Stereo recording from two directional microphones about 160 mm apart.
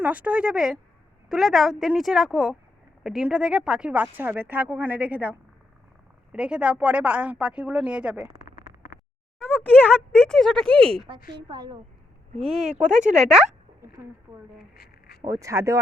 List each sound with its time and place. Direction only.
0.0 s a woman's voice: 10° right (ahead or behind)
9.4 s speech: 10° left (ahead or behind)
10.7 s speech: 35° right (ahead or behind)
12.5 s speech: 5° right (ahead or behind)
12.9 s speech: 50° right (ahead or behind)
13.1 s a woman's voice: 5° right (ahead or behind)
14.8 s a sound: 75° left (ahead or behind)
15.2 s speech: 20° right (ahead or behind)